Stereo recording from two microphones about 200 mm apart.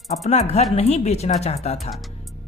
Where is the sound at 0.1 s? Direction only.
30° left (ahead or behind).